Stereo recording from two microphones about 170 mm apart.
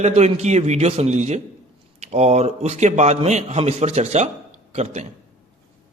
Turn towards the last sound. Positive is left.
turn(degrees=-40)  # may be behind; listen again after turning